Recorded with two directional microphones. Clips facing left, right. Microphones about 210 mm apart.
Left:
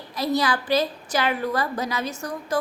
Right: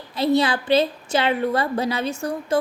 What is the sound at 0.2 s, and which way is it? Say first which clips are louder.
A woman's voice: right 4 dB; 25° right (ahead or behind).